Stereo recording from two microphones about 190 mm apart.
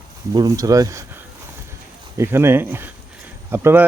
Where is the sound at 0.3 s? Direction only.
15° right (ahead or behind).